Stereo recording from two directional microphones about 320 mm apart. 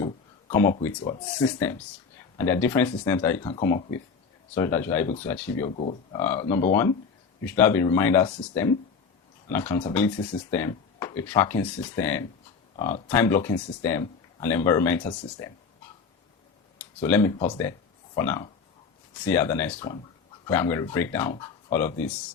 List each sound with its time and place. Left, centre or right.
0.0 s speech: centre
5.7 s speech: centre
6.1 s speech: centre
16.7 s speech: centre